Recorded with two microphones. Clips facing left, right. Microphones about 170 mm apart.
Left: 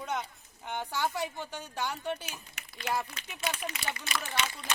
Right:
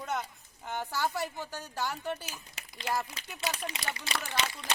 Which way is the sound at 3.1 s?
20° right (ahead or behind).